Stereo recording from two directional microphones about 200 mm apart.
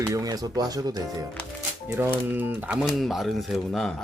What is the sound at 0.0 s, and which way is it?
Speech, 15° right (ahead or behind).